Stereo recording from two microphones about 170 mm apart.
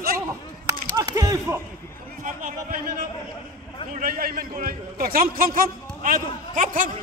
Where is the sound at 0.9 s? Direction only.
20° right (ahead or behind).